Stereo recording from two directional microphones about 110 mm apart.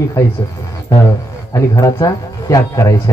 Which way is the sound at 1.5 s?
30° left (ahead or behind).